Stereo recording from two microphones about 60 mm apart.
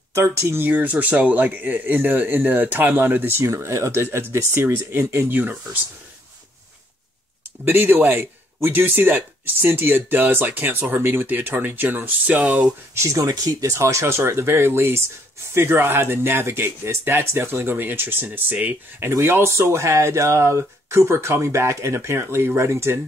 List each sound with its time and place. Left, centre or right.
0.1 s speech: right
0.7 s speech: right
3.4 s speech: right
7.6 s speech: right
12.4 s speech: centre
12.9 s speech: right
14.1 s speech: right
18.9 s speech: right